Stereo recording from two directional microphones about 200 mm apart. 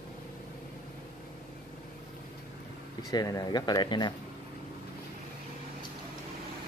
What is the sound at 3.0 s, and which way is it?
Speech, 20° left (ahead or behind).